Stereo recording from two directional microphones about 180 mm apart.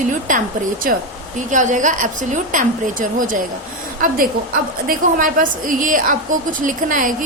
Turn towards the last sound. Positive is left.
turn(degrees=-50)  # may be behind; listen again after turning